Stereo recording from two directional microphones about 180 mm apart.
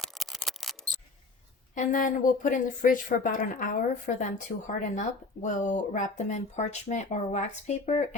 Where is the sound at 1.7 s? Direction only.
45° left (ahead or behind).